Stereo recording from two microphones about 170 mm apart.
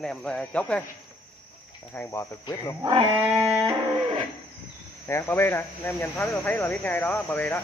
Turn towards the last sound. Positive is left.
turn(degrees=10)  # may be behind; listen again after turning